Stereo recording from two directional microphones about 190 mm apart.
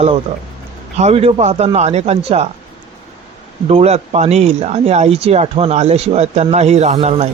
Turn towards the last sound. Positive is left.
turn(degrees=-35)  # may be behind; listen again after turning